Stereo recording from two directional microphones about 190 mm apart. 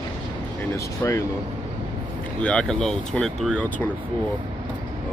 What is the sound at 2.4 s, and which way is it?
Speech, 5° left (ahead or behind).